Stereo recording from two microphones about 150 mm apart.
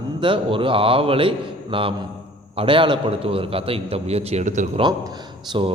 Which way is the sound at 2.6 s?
35° right (ahead or behind).